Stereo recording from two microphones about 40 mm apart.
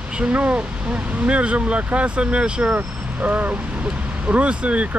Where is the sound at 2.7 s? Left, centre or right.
Right.